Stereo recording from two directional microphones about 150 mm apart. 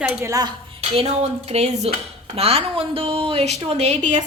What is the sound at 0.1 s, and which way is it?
Speech, 20° right (ahead or behind).